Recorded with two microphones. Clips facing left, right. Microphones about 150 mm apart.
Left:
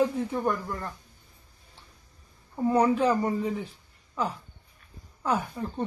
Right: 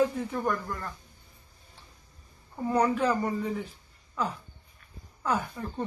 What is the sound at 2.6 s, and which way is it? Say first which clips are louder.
Speech: left 3 dB; 10° left (ahead or behind).